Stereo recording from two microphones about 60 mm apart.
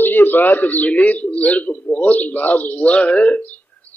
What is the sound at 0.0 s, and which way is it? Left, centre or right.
A man's voice, left.